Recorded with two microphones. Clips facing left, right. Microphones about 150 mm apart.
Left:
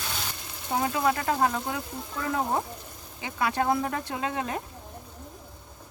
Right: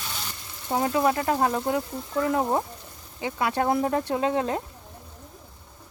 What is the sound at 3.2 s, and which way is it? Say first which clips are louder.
Speech: right 2 dB; 25° right (ahead or behind).